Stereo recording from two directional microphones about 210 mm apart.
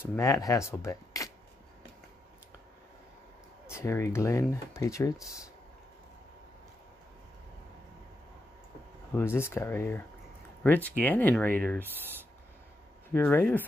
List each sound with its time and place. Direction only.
0.0 s speech: 15° left (ahead or behind)
3.6 s speech: 10° left (ahead or behind)
9.1 s speech: 10° left (ahead or behind)
13.1 s speech: 10° left (ahead or behind)